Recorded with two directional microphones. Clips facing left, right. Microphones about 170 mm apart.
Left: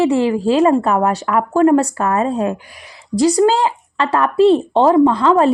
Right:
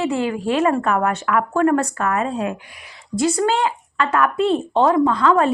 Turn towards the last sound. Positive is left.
turn(degrees=30)  # may be behind; listen again after turning